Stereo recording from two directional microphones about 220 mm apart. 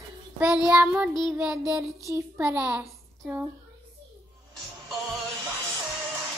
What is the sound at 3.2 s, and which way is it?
Speech, 5° right (ahead or behind).